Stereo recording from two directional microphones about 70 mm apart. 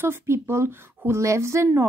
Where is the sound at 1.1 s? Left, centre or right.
Right.